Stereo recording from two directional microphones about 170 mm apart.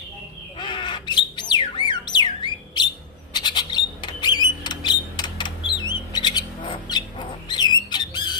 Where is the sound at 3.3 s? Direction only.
25° left (ahead or behind).